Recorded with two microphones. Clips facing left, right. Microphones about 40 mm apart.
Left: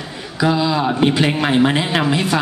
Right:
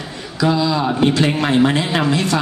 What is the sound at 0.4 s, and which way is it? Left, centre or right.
A man's voice, centre.